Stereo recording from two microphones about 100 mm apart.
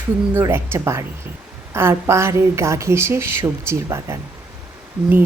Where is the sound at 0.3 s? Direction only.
25° right (ahead or behind).